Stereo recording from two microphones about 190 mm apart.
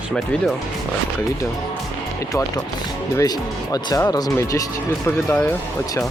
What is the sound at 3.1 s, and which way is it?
Speech, 20° left (ahead or behind).